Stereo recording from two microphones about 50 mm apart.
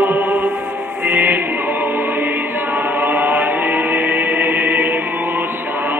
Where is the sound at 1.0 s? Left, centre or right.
Right.